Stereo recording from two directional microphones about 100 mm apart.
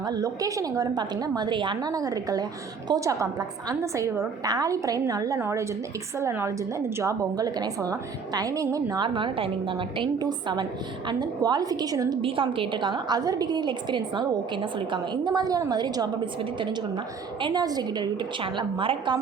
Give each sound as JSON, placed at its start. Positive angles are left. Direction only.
{"t": 0.0, "sound": "a woman's voice", "side_deg": -40}
{"t": 9.0, "sound": "a woman's voice", "side_deg": -55}
{"t": 10.2, "sound": "a woman's voice", "side_deg": -45}
{"t": 12.2, "sound": "a woman's voice", "side_deg": -60}
{"t": 18.5, "sound": "a woman's voice", "side_deg": -55}